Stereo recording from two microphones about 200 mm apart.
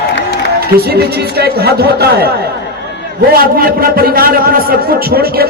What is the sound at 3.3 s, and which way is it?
A man's voice, 45° right (ahead or behind).